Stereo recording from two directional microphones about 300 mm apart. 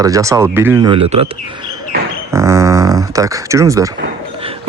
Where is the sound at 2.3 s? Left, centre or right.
Centre.